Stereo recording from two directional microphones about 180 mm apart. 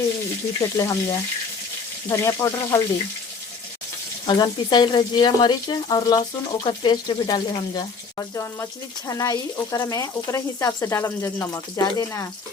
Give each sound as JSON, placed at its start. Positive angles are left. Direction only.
{"t": 0.6, "sound": "speech", "side_deg": 15}
{"t": 4.3, "sound": "speech", "side_deg": 25}